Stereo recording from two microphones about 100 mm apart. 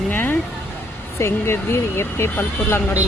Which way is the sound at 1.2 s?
25° left (ahead or behind).